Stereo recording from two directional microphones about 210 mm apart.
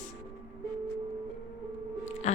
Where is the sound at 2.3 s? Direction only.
30° left (ahead or behind).